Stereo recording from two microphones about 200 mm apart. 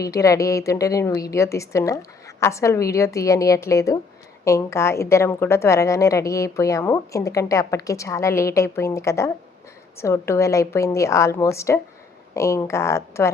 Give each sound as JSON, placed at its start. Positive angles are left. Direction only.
{"t": 0.0, "sound": "a woman's voice", "side_deg": 15}